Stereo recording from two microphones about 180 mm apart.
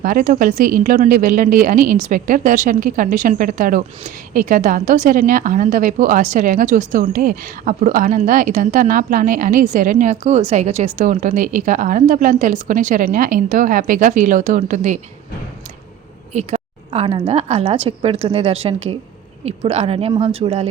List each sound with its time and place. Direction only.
0.0 s a woman's voice: 50° right (ahead or behind)
16.3 s a woman's voice: 40° right (ahead or behind)